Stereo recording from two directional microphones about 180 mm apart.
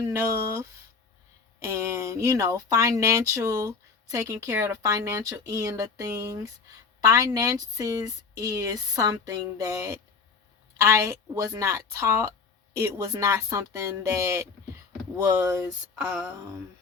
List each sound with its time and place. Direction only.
0.1 s speech: 15° right (ahead or behind)